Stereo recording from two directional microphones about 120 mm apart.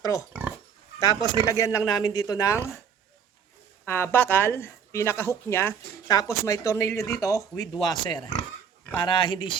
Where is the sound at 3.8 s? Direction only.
20° left (ahead or behind).